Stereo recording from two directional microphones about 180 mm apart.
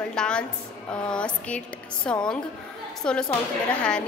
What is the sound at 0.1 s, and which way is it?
Speech, 5° left (ahead or behind).